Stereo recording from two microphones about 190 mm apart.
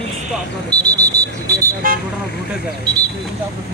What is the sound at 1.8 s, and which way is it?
Speech, 45° right (ahead or behind).